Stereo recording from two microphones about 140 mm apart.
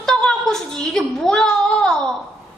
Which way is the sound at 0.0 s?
5° left (ahead or behind).